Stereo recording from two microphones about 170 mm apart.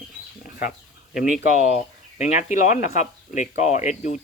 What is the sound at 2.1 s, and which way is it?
Speech, 45° left (ahead or behind).